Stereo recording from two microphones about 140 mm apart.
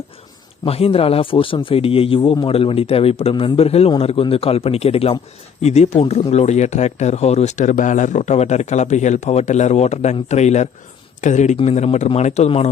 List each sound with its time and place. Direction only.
0.6 s speech: 45° left (ahead or behind)
11.5 s speech: 50° left (ahead or behind)